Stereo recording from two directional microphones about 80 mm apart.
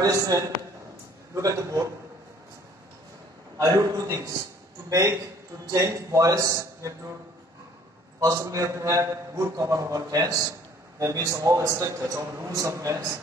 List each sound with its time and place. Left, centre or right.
0.0 s a man's voice: right
3.5 s a man's voice: right
8.2 s a man's voice: right